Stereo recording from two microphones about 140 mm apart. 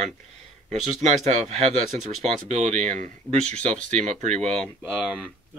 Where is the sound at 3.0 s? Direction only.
10° left (ahead or behind).